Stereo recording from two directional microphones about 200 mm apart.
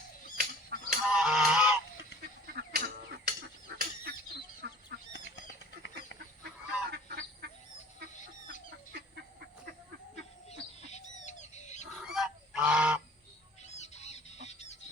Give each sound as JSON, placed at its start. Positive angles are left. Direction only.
{"t": 0.3, "sound": "a sound", "side_deg": -45}
{"t": 1.0, "sound": "goose", "side_deg": -5}
{"t": 2.5, "sound": "a sound", "side_deg": -50}
{"t": 4.6, "sound": "goose", "side_deg": -55}
{"t": 5.1, "sound": "bird flight", "side_deg": 60}
{"t": 6.9, "sound": "goose", "side_deg": -50}
{"t": 10.5, "sound": "bird", "side_deg": 35}
{"t": 12.0, "sound": "goose", "side_deg": -5}
{"t": 13.7, "sound": "bird", "side_deg": 35}
{"t": 14.4, "sound": "chicken", "side_deg": 35}